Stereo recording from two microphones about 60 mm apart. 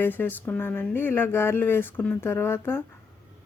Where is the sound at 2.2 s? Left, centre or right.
Left.